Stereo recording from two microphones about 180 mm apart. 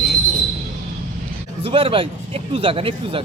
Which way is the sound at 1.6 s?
30° right (ahead or behind).